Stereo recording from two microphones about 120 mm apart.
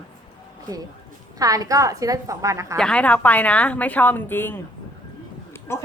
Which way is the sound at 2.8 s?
10° left (ahead or behind).